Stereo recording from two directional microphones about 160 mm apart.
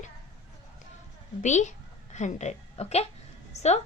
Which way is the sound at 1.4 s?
50° left (ahead or behind).